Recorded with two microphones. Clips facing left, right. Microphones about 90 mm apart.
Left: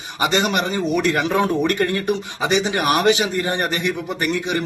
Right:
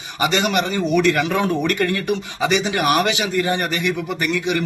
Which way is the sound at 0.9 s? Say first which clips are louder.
Right 3 dB; 20° left (ahead or behind).